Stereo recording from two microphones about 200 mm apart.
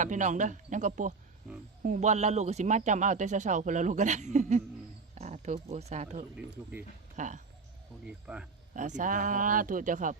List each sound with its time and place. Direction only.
0.0 s a man's voice: 40° right (ahead or behind)
6.3 s speech: 5° right (ahead or behind)
7.2 s a man's voice: 40° right (ahead or behind)
8.0 s speech: 5° right (ahead or behind)
8.7 s a man's voice: 40° right (ahead or behind)